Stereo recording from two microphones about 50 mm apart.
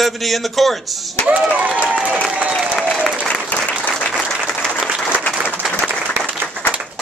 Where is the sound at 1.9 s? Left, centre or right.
Right.